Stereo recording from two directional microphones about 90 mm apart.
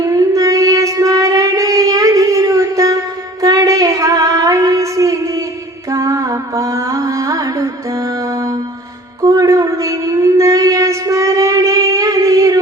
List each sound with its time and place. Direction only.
0.0 s child singing: 40° right (ahead or behind)
3.4 s female singing: 40° right (ahead or behind)
5.9 s music: 35° right (ahead or behind)
9.2 s a sound: 40° right (ahead or behind)